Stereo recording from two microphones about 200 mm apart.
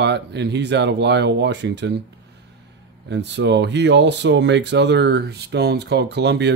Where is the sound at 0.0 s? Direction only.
60° right (ahead or behind).